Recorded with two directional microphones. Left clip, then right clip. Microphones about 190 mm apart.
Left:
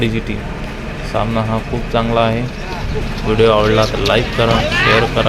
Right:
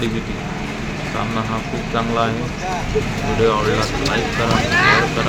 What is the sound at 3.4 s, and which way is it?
Speech, 35° left (ahead or behind).